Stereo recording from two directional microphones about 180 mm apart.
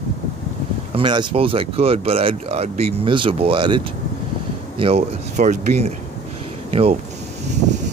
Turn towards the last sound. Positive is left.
turn(degrees=-40)  # may be behind; listen again after turning